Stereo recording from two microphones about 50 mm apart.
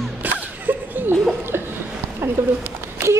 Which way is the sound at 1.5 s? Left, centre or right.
Right.